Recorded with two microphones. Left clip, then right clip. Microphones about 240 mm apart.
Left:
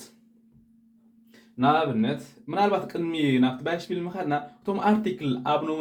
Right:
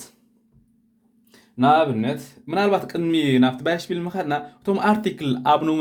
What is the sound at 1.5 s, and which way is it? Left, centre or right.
Speech, right.